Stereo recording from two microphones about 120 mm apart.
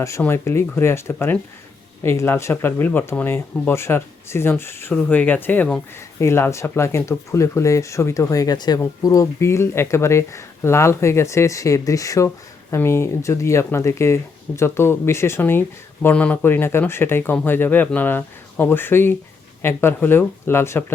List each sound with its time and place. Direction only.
0.2 s speech: 20° left (ahead or behind)